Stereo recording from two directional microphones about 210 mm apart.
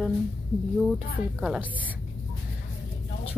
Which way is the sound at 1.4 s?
5° right (ahead or behind).